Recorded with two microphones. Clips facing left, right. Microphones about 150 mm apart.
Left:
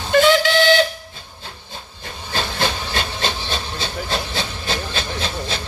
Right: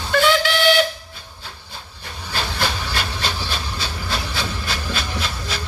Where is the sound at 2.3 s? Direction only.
25° left (ahead or behind).